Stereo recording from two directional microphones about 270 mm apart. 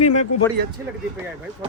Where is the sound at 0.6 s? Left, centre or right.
Right.